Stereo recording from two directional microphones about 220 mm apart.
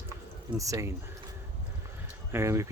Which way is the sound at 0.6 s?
15° right (ahead or behind).